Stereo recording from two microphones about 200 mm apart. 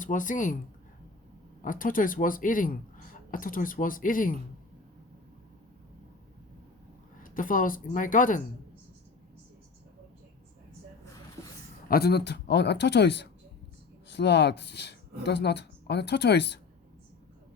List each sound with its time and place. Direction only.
0.0 s speech: 40° left (ahead or behind)
1.6 s speech: 45° left (ahead or behind)
7.2 s speech: 45° left (ahead or behind)
11.9 s speech: 50° left (ahead or behind)